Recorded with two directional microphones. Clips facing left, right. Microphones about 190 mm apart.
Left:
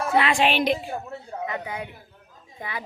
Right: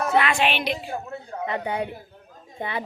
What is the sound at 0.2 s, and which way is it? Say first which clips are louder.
Speech: left 4 dB; 30° left (ahead or behind).